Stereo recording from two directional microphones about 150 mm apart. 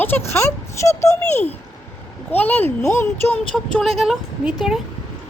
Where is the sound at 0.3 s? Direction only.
15° left (ahead or behind).